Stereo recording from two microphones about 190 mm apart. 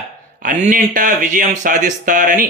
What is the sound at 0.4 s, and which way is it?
Speech, 45° right (ahead or behind).